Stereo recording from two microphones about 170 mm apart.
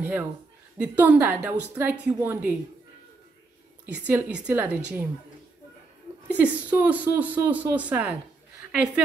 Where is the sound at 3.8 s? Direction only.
10° right (ahead or behind).